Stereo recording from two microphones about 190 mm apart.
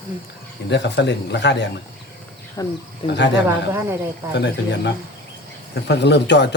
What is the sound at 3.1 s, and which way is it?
Speech, 65° left (ahead or behind).